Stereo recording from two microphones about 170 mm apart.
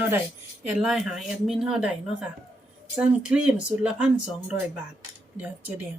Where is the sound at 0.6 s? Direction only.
5° right (ahead or behind).